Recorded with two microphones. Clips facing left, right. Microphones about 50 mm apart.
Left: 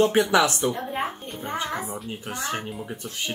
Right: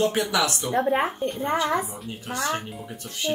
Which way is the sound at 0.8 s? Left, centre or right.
Right.